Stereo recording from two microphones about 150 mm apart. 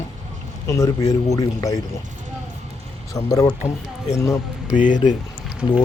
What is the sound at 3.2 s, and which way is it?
Speech, 25° left (ahead or behind).